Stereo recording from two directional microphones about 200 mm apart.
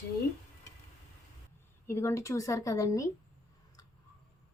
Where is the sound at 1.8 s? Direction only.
15° left (ahead or behind).